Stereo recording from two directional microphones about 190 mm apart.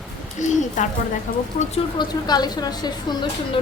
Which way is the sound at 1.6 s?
30° left (ahead or behind).